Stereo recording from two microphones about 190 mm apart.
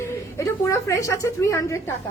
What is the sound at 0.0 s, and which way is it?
A woman's voice, 15° left (ahead or behind).